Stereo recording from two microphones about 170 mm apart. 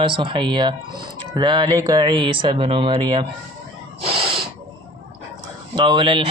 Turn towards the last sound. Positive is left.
turn(degrees=-30)  # may be behind; listen again after turning